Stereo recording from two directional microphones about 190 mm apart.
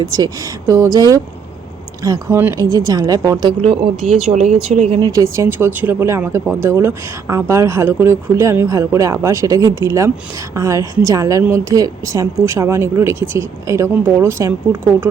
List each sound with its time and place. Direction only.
0.0 s speech: 20° right (ahead or behind)
4.0 s speech: centre (ahead or behind)
4.3 s speech: 40° right (ahead or behind)
4.9 s speech: 20° right (ahead or behind)